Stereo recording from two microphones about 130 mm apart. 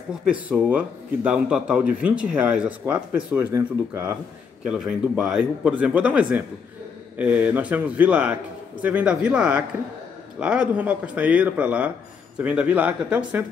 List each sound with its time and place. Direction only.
0.1 s a man's voice: 5° right (ahead or behind)
3.3 s speech: 20° right (ahead or behind)
4.6 s a man's voice: 5° right (ahead or behind)